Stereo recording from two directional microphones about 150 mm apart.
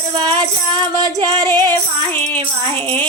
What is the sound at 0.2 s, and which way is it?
Music, 30° right (ahead or behind).